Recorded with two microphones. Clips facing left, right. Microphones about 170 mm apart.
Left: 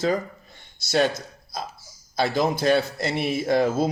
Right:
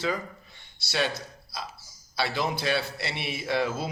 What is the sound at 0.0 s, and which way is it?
A man's voice, 45° left (ahead or behind).